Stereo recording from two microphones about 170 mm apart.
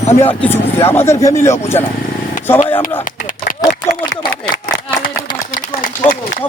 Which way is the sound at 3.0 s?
50° left (ahead or behind).